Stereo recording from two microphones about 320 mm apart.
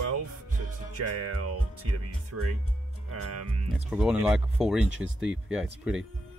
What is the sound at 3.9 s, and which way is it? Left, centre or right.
Speech, centre.